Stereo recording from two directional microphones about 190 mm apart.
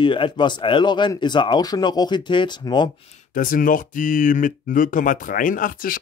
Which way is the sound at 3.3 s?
45° left (ahead or behind).